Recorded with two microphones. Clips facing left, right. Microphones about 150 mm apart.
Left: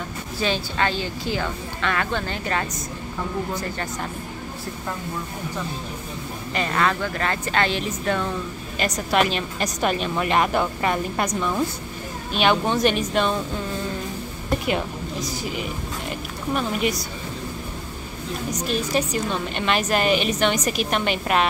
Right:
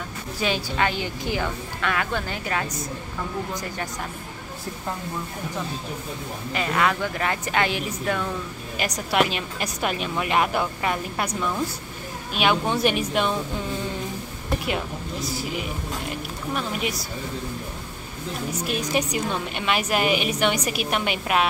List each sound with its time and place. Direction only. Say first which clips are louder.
0.4 s a woman's voice: left 1 dB; 10° right (ahead or behind)
6.5 s a woman's voice: left 1 dB; 5° right (ahead or behind)
12.4 s a woman's voice: left 2 dB; 5° right (ahead or behind)
16.5 s a woman's voice: left 5 dB; centre (ahead or behind)
18.5 s a woman's voice: left 2 dB; 10° right (ahead or behind)